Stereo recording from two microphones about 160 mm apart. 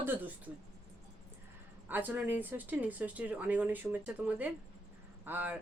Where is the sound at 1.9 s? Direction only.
10° right (ahead or behind).